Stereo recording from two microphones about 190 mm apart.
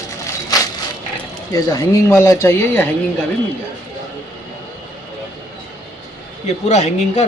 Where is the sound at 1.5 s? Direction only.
20° left (ahead or behind).